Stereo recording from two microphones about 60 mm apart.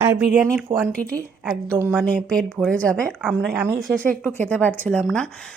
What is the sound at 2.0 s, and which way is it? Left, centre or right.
A woman's voice, centre.